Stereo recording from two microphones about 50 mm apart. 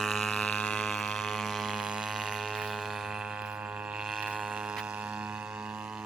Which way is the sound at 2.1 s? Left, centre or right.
Centre.